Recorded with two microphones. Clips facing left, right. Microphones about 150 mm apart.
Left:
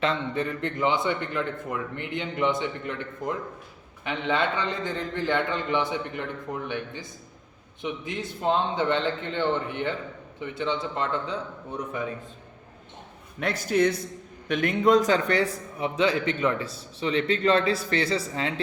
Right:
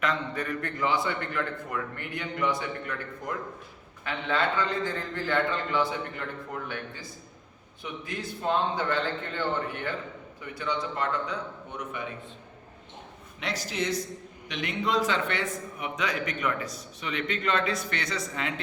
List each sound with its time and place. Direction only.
0.0 s a man's voice: 25° left (ahead or behind)
13.4 s a man's voice: 50° left (ahead or behind); by 18.6 s 30° left (ahead or behind)